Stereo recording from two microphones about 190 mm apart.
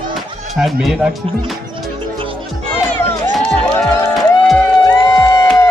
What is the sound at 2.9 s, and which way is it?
Music, 5° left (ahead or behind).